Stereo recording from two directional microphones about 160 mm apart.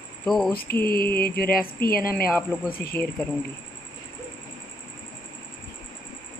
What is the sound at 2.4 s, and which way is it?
Speech, 10° left (ahead or behind).